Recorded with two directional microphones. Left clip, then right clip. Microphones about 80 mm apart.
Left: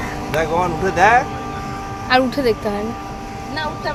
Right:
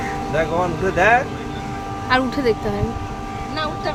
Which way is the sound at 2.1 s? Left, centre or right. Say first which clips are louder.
Left 2 dB; centre.